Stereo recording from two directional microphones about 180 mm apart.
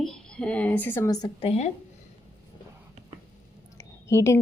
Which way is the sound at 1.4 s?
35° left (ahead or behind).